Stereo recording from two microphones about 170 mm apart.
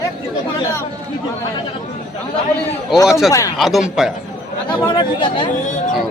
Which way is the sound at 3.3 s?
20° left (ahead or behind).